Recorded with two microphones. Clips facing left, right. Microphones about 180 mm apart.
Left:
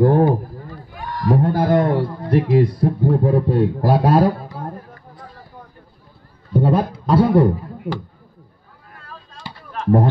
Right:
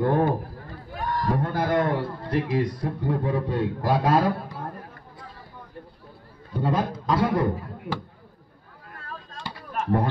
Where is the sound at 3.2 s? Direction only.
35° left (ahead or behind).